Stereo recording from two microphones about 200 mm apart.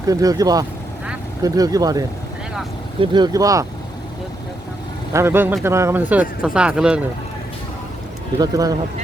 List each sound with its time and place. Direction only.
0.0 s speech: 15° right (ahead or behind)
5.1 s speech: 10° right (ahead or behind)
8.4 s speech: 15° right (ahead or behind)